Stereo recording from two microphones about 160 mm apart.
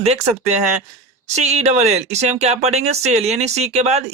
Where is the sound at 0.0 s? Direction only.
40° right (ahead or behind).